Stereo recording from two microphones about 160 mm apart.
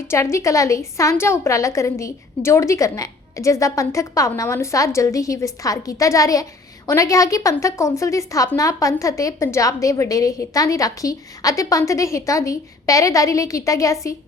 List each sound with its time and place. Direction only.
0.1 s a woman's voice: 20° left (ahead or behind)